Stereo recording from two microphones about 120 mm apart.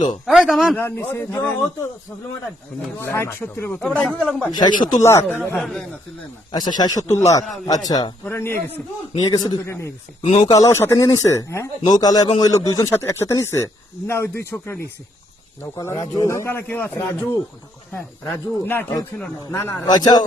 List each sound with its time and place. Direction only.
0.3 s a man's voice: centre (ahead or behind)
0.8 s a man's voice: 20° left (ahead or behind)
3.0 s a man's voice: 20° left (ahead or behind)
3.8 s a man's voice: centre (ahead or behind)
4.5 s speech: 35° left (ahead or behind)
5.0 s a man's voice: 20° left (ahead or behind)
5.5 s a man's voice: centre (ahead or behind)
6.5 s speech: 35° left (ahead or behind)
8.2 s a man's voice: 20° left (ahead or behind)
9.1 s speech: 35° left (ahead or behind)
9.6 s a man's voice: 20° left (ahead or behind)